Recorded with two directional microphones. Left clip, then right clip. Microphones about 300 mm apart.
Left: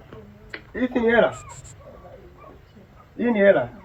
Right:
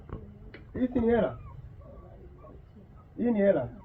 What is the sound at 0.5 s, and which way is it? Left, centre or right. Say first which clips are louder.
Speech: left 6 dB; centre.